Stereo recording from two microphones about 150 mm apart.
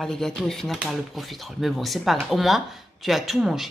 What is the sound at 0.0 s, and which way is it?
Speech, centre (ahead or behind).